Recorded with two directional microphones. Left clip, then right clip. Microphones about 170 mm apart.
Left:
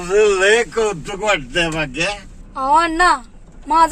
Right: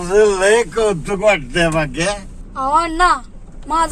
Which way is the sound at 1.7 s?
40° left (ahead or behind).